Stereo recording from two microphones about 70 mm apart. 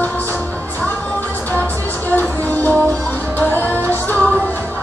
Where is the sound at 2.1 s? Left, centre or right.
Left.